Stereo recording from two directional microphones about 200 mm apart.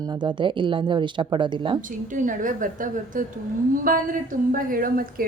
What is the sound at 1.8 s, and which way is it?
A woman's voice, 40° right (ahead or behind).